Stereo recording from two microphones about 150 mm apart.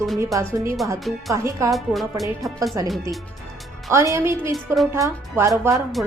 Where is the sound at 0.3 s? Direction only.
20° right (ahead or behind).